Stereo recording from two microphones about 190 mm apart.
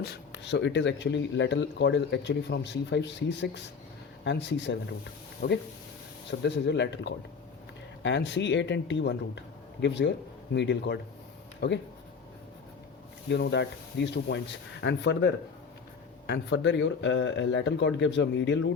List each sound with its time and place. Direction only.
0.0 s speech: 65° left (ahead or behind)
13.3 s speech: 65° left (ahead or behind)